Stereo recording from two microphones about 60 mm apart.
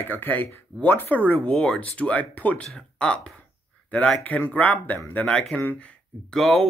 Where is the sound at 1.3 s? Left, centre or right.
Centre.